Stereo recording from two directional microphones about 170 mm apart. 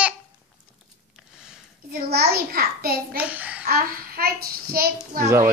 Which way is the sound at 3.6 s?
65° right (ahead or behind).